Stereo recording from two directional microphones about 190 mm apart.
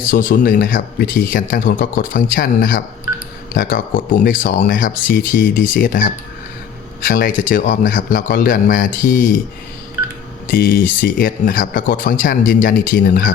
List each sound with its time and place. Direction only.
0.1 s speech: 45° left (ahead or behind)
10.4 s speech: 45° left (ahead or behind)